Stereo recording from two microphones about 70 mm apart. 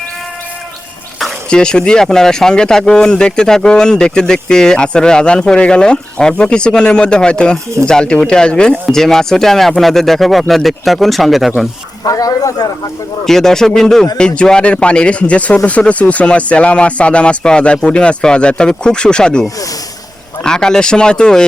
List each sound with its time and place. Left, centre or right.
1.5 s speech: centre
12.0 s speech: left
13.2 s speech: centre